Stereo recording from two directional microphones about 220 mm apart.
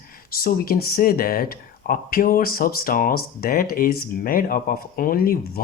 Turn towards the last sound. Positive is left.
turn(degrees=40)  # may be behind; listen again after turning